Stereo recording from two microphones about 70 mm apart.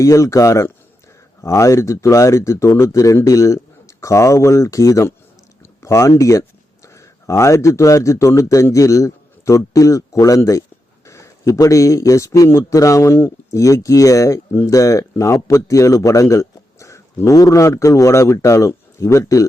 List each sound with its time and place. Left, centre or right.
0.0 s a man's voice: left